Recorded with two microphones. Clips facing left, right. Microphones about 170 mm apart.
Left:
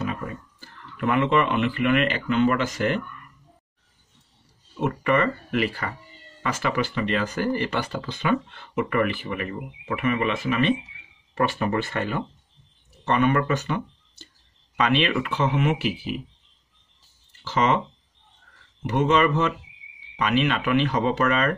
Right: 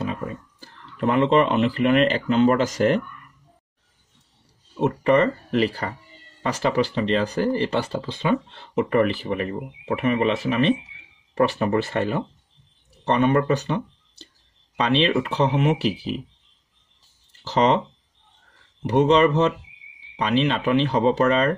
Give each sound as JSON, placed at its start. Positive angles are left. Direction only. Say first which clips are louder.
{"t": 0.0, "sound": "speech", "louder": "right 2 dB", "side_deg": -30}
{"t": 4.7, "sound": "speech", "louder": "right 4 dB", "side_deg": -30}
{"t": 17.5, "sound": "speech", "louder": "right 3 dB", "side_deg": -35}
{"t": 18.8, "sound": "speech", "louder": "right 4 dB", "side_deg": -35}